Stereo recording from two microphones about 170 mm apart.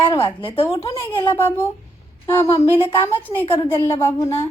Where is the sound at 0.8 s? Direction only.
15° left (ahead or behind).